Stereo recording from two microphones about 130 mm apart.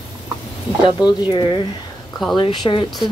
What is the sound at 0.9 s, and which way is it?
A woman's voice, 35° left (ahead or behind).